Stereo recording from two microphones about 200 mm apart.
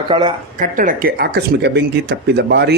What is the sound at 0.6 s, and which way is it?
Speech, 40° right (ahead or behind).